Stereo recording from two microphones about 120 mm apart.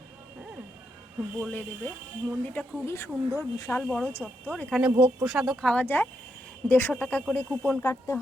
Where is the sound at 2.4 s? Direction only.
15° left (ahead or behind).